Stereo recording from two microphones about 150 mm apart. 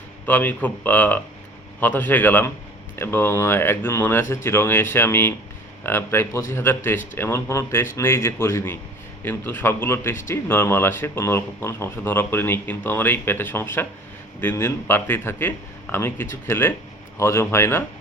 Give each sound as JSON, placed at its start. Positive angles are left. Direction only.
{"t": 0.3, "sound": "speech", "side_deg": 10}